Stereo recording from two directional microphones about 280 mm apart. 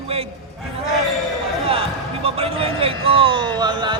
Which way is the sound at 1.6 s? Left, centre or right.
Right.